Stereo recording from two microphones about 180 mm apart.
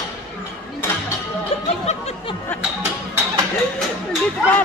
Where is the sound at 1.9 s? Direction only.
35° left (ahead or behind).